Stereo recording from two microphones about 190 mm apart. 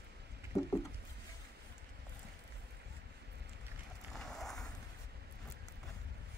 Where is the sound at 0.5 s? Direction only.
15° left (ahead or behind).